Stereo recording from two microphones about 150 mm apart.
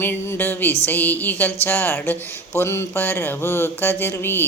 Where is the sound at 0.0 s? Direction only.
15° left (ahead or behind).